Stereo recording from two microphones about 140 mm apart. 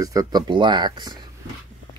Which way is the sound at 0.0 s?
25° right (ahead or behind).